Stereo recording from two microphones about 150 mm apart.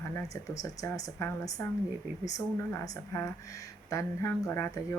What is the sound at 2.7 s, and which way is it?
Speech, 20° left (ahead or behind).